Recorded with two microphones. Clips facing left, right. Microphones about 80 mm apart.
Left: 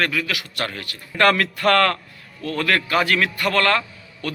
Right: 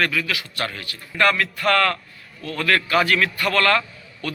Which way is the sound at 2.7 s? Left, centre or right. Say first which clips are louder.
Right 1 dB; left.